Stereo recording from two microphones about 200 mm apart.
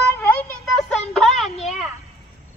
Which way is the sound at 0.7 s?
Centre (ahead or behind).